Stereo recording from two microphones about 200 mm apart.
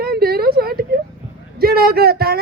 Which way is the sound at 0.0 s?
50° right (ahead or behind).